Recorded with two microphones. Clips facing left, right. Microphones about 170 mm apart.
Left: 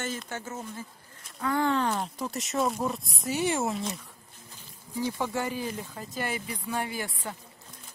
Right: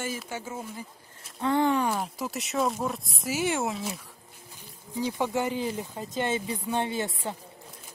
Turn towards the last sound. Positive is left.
turn(degrees=-25)  # may be behind; listen again after turning